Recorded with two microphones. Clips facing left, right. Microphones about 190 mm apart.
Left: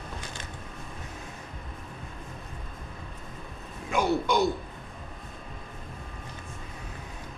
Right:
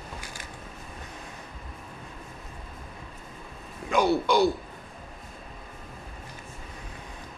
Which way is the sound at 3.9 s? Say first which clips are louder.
Right 3 dB; 35° right (ahead or behind).